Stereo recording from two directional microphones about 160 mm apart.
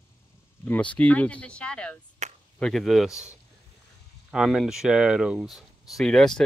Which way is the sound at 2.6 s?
Centre (ahead or behind).